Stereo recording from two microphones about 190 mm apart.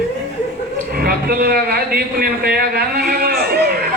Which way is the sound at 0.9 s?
50° right (ahead or behind).